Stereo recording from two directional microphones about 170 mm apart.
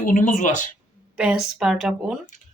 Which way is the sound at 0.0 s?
50° left (ahead or behind).